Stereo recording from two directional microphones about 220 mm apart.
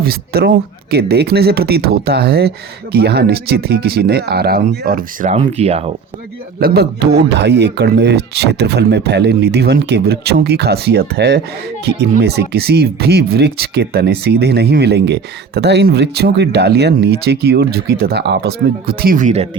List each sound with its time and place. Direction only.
0.0 s speech: 45° right (ahead or behind); by 5.9 s 30° right (ahead or behind)
6.6 s speech: 45° right (ahead or behind)